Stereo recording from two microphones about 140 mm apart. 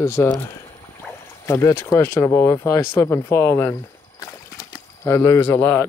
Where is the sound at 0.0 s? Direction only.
20° left (ahead or behind).